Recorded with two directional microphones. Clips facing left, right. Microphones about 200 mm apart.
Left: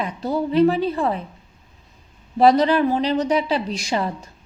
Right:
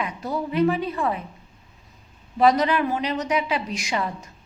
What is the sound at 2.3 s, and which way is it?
A woman's voice, 30° left (ahead or behind).